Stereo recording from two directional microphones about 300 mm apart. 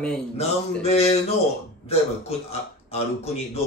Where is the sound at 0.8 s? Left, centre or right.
Left.